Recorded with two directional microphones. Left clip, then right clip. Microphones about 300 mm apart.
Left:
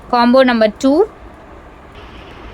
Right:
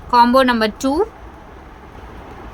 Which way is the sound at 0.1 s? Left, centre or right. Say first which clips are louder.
Left 1 dB; centre.